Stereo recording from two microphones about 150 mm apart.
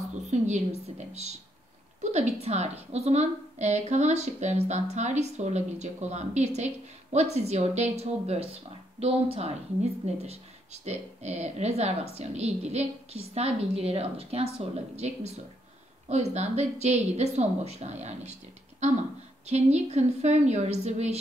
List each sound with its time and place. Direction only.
0.9 s a woman's voice: 45° right (ahead or behind)